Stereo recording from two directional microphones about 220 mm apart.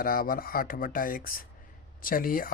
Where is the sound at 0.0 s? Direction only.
40° left (ahead or behind).